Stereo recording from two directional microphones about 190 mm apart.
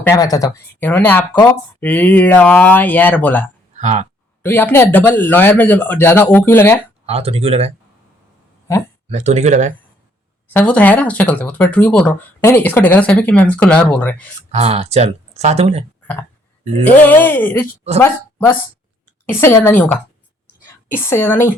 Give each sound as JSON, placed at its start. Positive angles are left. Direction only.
{"t": 0.0, "sound": "speech", "side_deg": 15}
{"t": 3.8, "sound": "speech", "side_deg": -40}
{"t": 4.4, "sound": "speech", "side_deg": 10}
{"t": 7.1, "sound": "speech", "side_deg": -30}
{"t": 9.0, "sound": "speech", "side_deg": -35}
{"t": 10.5, "sound": "speech", "side_deg": 10}
{"t": 14.5, "sound": "speech", "side_deg": -35}
{"t": 17.0, "sound": "speech", "side_deg": 10}